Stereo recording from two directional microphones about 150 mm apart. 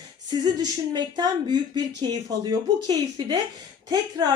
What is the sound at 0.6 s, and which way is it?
Speech, 30° right (ahead or behind).